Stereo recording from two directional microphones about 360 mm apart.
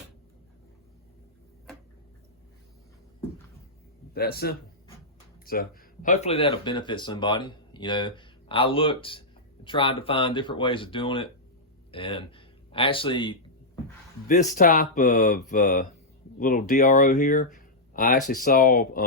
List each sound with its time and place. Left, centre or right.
4.1 s speech: left